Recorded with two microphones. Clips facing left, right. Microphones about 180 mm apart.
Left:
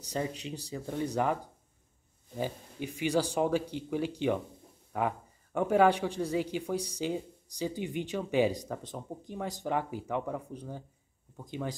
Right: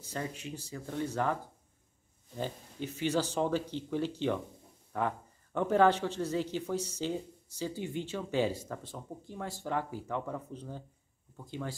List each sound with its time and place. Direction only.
0.1 s speech: 20° left (ahead or behind)